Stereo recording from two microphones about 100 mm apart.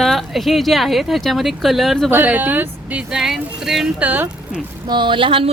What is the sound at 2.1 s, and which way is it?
Speech, 15° right (ahead or behind).